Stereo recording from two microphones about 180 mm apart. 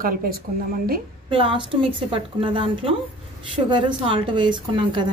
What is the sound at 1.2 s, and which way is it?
A woman's voice, 25° right (ahead or behind).